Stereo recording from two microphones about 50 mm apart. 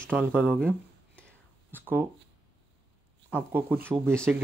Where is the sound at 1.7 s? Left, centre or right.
Right.